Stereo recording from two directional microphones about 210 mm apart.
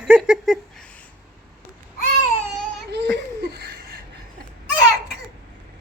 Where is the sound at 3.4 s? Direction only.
50° right (ahead or behind).